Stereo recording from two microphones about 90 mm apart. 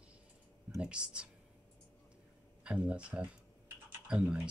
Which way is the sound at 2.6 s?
15° right (ahead or behind).